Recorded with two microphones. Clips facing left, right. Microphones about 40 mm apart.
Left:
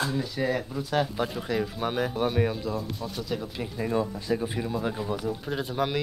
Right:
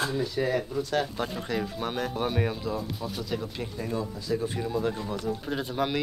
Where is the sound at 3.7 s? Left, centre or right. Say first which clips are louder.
Left 6 dB; left.